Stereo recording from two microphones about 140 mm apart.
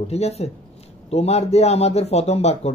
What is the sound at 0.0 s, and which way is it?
Speech, 50° left (ahead or behind).